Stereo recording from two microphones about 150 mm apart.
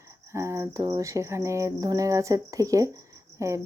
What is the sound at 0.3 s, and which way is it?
A woman's voice, 20° right (ahead or behind).